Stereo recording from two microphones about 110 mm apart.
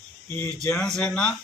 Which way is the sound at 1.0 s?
10° left (ahead or behind).